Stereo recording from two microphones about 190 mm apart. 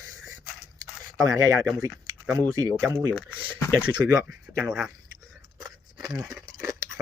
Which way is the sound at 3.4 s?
10° right (ahead or behind).